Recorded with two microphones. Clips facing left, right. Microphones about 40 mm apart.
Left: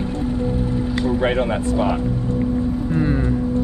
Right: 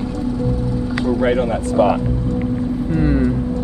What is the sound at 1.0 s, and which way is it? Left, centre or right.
Speech, left.